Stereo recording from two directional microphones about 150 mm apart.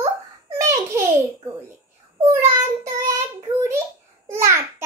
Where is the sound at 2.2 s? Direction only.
20° right (ahead or behind).